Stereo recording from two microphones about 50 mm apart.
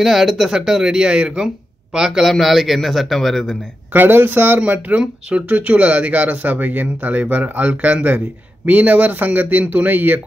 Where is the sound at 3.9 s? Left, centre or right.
Right.